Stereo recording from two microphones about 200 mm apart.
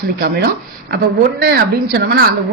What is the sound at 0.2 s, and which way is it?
Speech, 50° right (ahead or behind).